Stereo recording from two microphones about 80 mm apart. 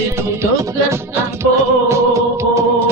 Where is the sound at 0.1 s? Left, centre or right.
Right.